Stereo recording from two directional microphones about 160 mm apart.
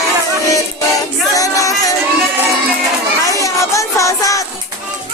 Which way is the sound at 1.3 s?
20° left (ahead or behind).